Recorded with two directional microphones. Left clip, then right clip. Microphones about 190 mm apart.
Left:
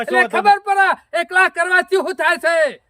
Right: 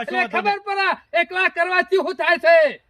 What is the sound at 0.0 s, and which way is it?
A woman's voice, 20° left (ahead or behind).